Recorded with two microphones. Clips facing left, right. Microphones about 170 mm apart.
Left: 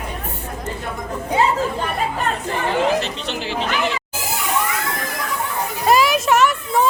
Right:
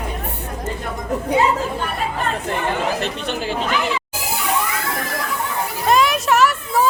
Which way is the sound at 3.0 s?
50° right (ahead or behind).